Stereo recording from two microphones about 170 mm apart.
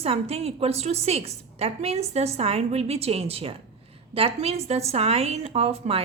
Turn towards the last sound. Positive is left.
turn(degrees=-35)  # may be behind; listen again after turning